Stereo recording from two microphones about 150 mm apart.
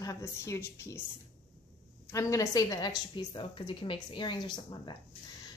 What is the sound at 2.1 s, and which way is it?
A woman's voice, 20° left (ahead or behind).